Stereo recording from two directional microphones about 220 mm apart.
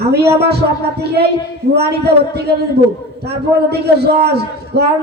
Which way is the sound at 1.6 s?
45° right (ahead or behind).